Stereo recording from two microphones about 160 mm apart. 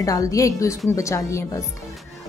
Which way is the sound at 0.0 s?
20° left (ahead or behind).